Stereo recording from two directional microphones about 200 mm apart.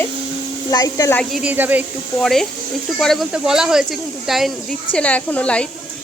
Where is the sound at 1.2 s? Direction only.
Centre (ahead or behind).